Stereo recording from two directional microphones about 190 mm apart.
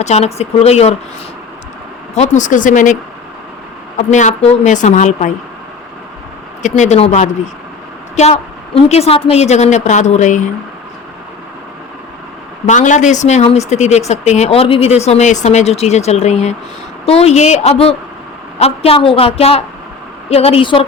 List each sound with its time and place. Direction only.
0.0 s speech: 35° left (ahead or behind)
2.1 s speech: 40° left (ahead or behind)
6.6 s speech: 40° left (ahead or behind)
12.6 s a woman's voice: 40° left (ahead or behind)